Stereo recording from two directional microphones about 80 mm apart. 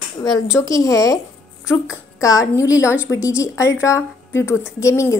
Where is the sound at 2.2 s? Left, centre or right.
Left.